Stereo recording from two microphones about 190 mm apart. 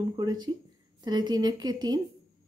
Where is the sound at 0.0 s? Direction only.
20° right (ahead or behind).